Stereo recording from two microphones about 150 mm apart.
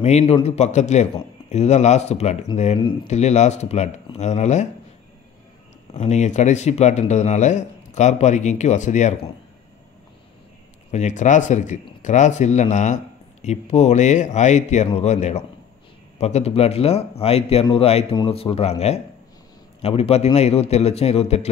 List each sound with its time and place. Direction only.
0.0 s speech: 45° left (ahead or behind)
5.9 s speech: 50° left (ahead or behind)
10.9 s a man's voice: 50° left (ahead or behind)